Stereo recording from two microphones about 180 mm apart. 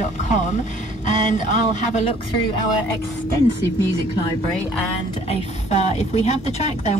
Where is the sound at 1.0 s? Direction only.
45° left (ahead or behind).